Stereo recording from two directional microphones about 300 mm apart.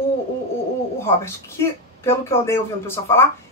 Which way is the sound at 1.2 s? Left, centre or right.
Centre.